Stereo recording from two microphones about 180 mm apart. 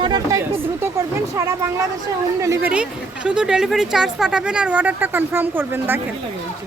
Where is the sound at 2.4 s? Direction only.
15° right (ahead or behind).